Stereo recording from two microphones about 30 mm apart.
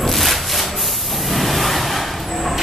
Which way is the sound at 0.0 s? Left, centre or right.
Centre.